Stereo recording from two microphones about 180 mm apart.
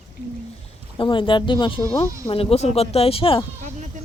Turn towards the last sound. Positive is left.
turn(degrees=30)  # may be behind; listen again after turning